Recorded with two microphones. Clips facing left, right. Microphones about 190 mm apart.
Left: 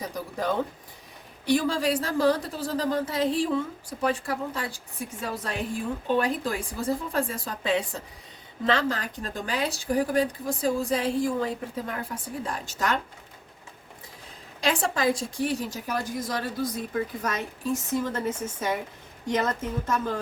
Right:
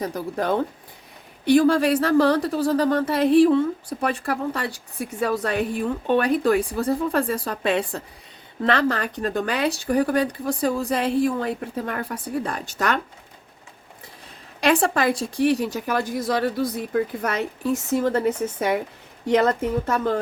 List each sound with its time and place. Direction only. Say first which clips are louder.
0.0 s speech: right 5 dB; 60° right (ahead or behind)
14.6 s a woman's voice: right 5 dB; 60° right (ahead or behind)